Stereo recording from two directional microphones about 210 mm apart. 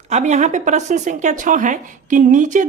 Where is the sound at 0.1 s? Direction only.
35° right (ahead or behind).